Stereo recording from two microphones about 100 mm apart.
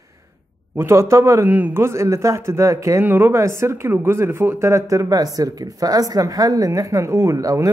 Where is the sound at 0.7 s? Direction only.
25° right (ahead or behind).